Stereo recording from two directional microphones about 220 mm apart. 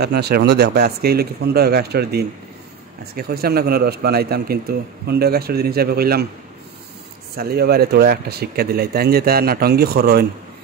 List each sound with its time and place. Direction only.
0.0 s a man's voice: 45° right (ahead or behind)
7.3 s a man's voice: 45° right (ahead or behind)